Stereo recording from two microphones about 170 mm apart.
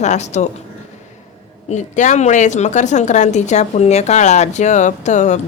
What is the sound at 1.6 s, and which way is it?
A woman's voice, 45° left (ahead or behind).